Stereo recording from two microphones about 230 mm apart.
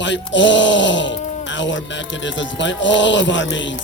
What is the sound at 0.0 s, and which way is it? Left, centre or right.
Speech, left.